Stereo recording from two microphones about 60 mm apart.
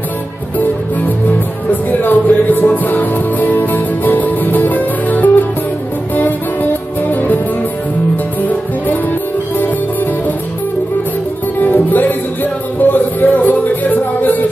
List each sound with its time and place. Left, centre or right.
1.7 s music: left
8.4 s music: left
11.6 s music: left